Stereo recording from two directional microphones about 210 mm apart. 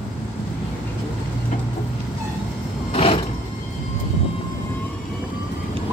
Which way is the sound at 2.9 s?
25° left (ahead or behind).